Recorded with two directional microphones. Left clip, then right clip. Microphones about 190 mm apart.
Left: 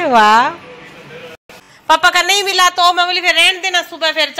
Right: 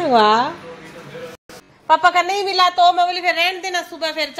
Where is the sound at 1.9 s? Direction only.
5° left (ahead or behind).